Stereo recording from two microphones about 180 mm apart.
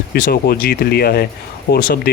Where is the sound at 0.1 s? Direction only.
60° left (ahead or behind).